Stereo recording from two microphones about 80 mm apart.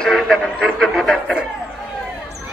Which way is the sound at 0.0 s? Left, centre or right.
Centre.